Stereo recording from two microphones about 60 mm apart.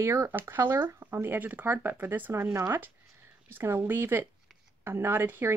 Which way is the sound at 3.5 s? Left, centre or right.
Right.